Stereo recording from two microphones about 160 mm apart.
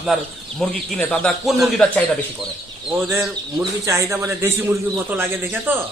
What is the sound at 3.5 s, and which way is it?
A man's voice, 20° right (ahead or behind).